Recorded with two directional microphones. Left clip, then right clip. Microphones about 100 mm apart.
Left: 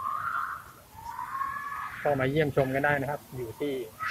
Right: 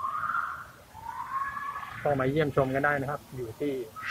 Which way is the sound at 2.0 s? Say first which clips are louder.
Even; 10° left (ahead or behind).